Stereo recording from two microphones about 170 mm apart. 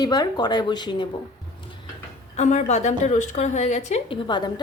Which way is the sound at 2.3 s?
45° left (ahead or behind).